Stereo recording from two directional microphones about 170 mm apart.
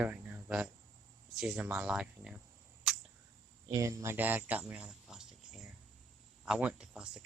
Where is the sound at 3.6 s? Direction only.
20° right (ahead or behind).